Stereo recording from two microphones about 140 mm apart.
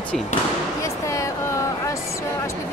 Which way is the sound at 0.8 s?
20° left (ahead or behind).